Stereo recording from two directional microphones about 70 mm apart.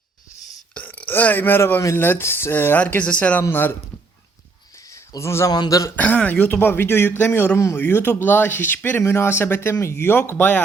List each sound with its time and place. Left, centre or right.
0.7 s burping: left
2.0 s speech: left
3.5 s speech: left
4.9 s a sound: left
5.5 s speech: left
6.0 s speech: centre